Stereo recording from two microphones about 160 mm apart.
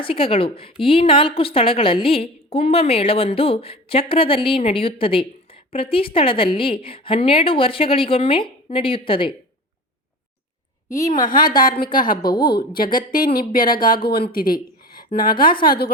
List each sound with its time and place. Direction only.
0.0 s a woman's voice: 35° left (ahead or behind)
10.8 s a woman's voice: 25° left (ahead or behind)
11.6 s a woman's voice: 70° left (ahead or behind)